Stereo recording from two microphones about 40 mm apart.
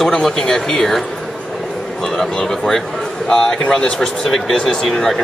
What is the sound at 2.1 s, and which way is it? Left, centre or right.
Speech, centre.